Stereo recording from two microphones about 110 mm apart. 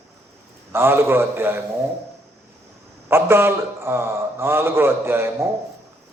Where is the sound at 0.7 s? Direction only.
20° right (ahead or behind).